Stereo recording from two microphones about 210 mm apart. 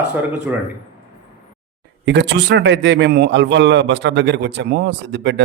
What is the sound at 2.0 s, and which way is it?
A man's voice, 55° right (ahead or behind).